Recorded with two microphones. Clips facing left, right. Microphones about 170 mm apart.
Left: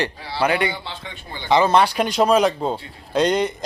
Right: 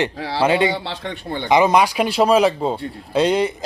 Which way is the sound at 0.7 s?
75° right (ahead or behind).